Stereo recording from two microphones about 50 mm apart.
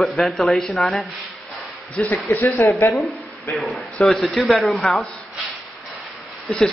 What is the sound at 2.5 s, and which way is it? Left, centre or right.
Speech, left.